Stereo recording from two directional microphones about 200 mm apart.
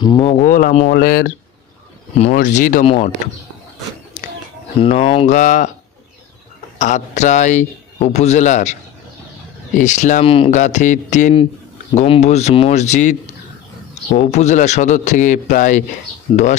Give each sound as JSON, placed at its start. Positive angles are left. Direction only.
{"t": 0.0, "sound": "speech", "side_deg": 20}
{"t": 0.5, "sound": "a man's voice", "side_deg": 40}
{"t": 2.3, "sound": "a man's voice", "side_deg": 40}
{"t": 2.8, "sound": "speech", "side_deg": 30}
{"t": 4.7, "sound": "a man's voice", "side_deg": 30}
{"t": 6.8, "sound": "a man's voice", "side_deg": 35}
{"t": 9.8, "sound": "a man's voice", "side_deg": 40}
{"t": 14.1, "sound": "a man's voice", "side_deg": 35}